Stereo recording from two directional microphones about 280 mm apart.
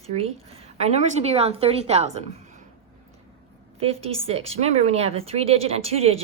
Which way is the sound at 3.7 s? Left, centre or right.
Right.